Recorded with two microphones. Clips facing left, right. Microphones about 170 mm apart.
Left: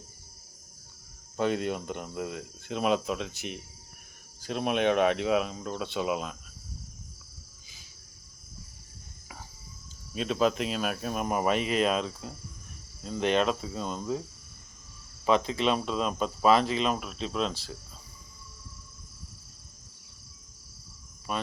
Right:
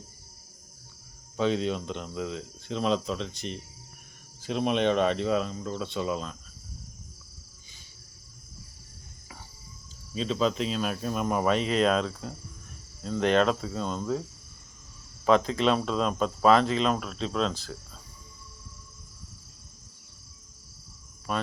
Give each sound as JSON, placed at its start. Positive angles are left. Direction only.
{"t": 1.4, "sound": "speech", "side_deg": 10}
{"t": 10.2, "sound": "speech", "side_deg": 5}
{"t": 13.1, "sound": "speech", "side_deg": -35}
{"t": 13.4, "sound": "speech", "side_deg": 10}
{"t": 15.3, "sound": "speech", "side_deg": -40}
{"t": 15.6, "sound": "speech", "side_deg": 5}